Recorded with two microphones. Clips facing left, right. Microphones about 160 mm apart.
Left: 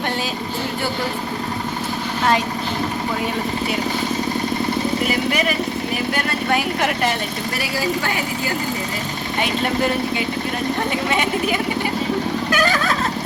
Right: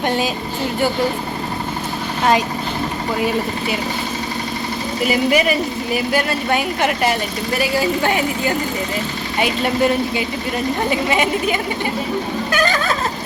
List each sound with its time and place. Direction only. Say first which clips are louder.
5.0 s speech: right 4 dB; 10° right (ahead or behind)
7.8 s speech: right 2 dB; 25° right (ahead or behind)
11.1 s speech: right 2 dB; centre (ahead or behind)
12.5 s a sound: right 2 dB; 5° left (ahead or behind)